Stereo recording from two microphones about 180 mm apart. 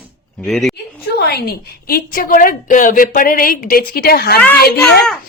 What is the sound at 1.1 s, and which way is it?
A woman's voice, 60° left (ahead or behind).